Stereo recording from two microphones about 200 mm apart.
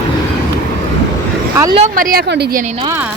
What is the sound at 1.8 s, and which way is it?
Speech, 45° right (ahead or behind).